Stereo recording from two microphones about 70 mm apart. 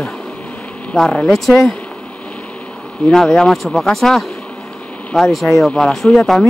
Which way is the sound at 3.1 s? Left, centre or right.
Centre.